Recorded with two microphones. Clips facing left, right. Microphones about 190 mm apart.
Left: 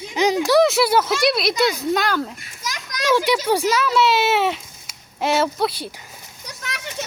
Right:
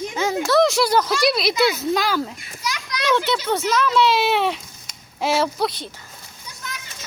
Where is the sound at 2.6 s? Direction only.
45° left (ahead or behind).